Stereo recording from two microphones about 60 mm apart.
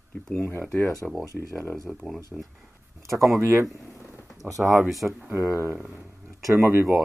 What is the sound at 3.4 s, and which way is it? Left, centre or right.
Speech, right.